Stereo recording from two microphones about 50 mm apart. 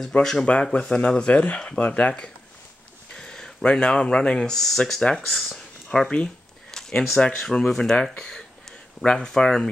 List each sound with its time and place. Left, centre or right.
0.2 s speech: centre
0.7 s speech: left
3.2 s speech: centre
5.9 s a sound: centre
7.2 s speech: left
7.6 s speech: centre